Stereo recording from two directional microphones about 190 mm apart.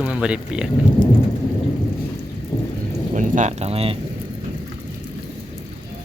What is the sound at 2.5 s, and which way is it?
Thunder, 20° left (ahead or behind).